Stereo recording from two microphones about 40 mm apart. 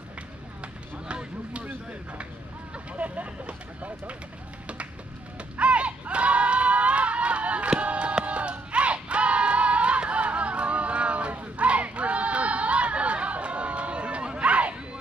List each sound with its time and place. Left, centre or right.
0.6 s run: right
3.0 s speech: right
5.6 s crowd: right